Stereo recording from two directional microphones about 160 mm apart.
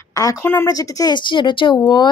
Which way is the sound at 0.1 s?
20° left (ahead or behind).